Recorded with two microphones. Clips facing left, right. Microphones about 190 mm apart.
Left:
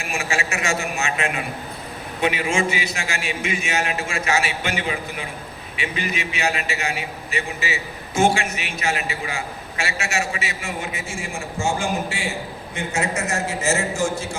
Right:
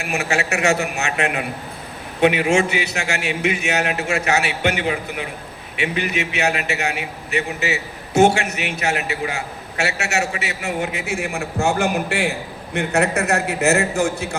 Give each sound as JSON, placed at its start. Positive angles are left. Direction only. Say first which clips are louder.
{"t": 0.0, "sound": "a man's voice", "louder": "right 4 dB", "side_deg": -65}